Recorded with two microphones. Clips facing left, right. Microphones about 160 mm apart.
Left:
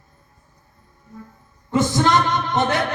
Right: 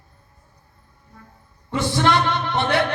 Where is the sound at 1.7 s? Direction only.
45° left (ahead or behind).